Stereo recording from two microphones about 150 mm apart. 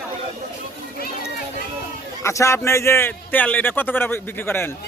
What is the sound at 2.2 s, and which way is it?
A man's voice, 20° left (ahead or behind).